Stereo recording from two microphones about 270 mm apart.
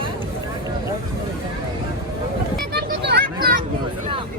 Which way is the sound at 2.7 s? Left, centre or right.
Right.